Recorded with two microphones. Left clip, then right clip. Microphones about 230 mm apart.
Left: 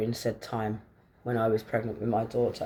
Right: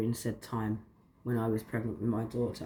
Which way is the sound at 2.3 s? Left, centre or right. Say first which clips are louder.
Left 7 dB; left.